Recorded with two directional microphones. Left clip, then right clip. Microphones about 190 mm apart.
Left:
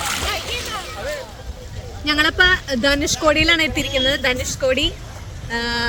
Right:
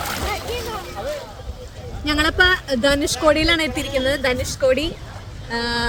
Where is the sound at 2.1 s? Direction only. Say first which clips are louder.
Left 1 dB; centre (ahead or behind).